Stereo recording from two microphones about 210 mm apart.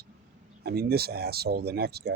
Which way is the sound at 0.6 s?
50° right (ahead or behind).